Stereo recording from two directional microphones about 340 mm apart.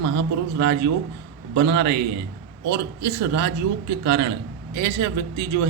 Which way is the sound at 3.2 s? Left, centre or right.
Right.